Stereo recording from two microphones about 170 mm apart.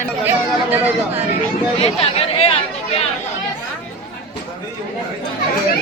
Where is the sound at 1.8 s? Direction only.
35° left (ahead or behind).